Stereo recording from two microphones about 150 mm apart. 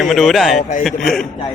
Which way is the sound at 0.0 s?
Centre (ahead or behind).